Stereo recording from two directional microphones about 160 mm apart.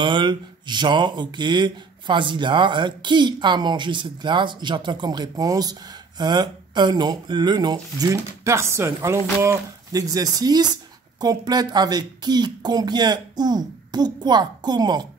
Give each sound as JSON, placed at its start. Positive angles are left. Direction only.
{"t": 0.0, "sound": "speech", "side_deg": -30}